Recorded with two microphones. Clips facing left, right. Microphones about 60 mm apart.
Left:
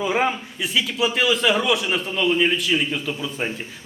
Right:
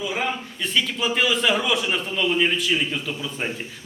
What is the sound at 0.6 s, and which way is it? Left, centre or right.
A man's voice, centre.